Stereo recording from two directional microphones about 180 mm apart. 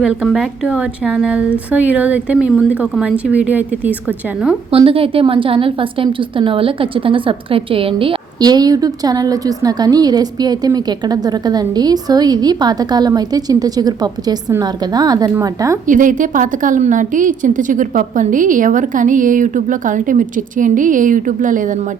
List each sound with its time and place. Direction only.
0.0 s a woman's voice: 5° right (ahead or behind)
4.7 s a woman's voice: 30° right (ahead or behind)
15.9 s a woman's voice: 45° right (ahead or behind)